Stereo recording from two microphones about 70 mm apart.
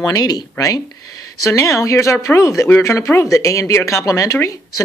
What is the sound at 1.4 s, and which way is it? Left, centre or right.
A woman's voice, left.